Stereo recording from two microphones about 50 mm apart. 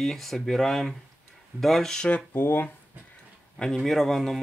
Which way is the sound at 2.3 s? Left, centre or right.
Left.